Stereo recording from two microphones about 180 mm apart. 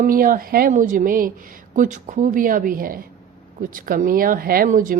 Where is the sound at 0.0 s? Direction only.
50° right (ahead or behind).